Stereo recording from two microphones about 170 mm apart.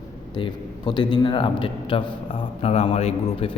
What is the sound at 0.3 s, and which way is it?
A man's voice, 25° left (ahead or behind).